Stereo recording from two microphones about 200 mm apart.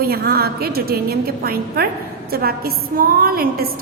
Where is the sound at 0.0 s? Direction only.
50° right (ahead or behind).